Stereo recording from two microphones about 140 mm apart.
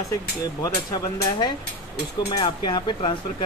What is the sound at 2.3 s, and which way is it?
Cutlery, 35° left (ahead or behind).